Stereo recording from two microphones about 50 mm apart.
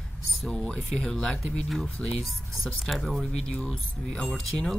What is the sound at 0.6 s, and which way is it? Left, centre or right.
Speech, centre.